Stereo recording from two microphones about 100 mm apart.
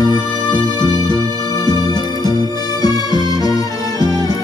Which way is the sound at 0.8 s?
40° right (ahead or behind).